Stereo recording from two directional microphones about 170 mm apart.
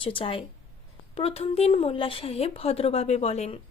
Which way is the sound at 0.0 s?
30° left (ahead or behind).